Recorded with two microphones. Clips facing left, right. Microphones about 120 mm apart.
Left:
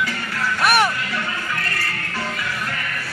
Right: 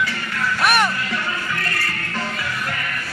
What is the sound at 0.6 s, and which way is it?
Music, 5° left (ahead or behind).